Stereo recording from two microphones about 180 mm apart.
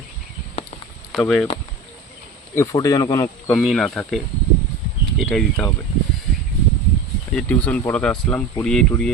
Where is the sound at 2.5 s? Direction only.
15° left (ahead or behind).